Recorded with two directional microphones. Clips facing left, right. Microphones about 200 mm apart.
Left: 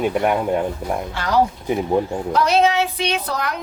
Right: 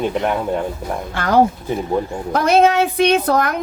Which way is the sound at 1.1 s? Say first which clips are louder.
Right 5 dB; 50° right (ahead or behind).